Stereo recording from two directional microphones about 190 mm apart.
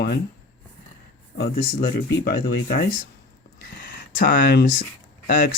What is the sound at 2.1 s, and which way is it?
Speech, 50° left (ahead or behind).